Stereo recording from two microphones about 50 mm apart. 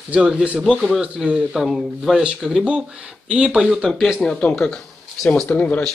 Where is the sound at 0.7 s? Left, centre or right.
Centre.